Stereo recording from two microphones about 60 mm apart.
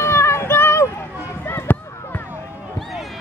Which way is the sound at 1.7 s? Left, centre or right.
Left.